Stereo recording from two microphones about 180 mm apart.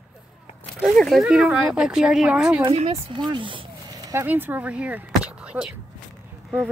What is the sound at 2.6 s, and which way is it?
Speech, 30° right (ahead or behind).